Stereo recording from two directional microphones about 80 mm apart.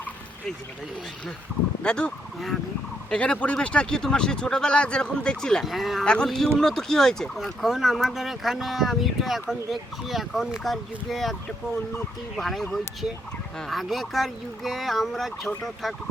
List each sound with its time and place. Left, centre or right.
1.8 s speech: centre